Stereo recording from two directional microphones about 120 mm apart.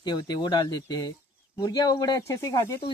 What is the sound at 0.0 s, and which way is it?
Speech, 40° left (ahead or behind).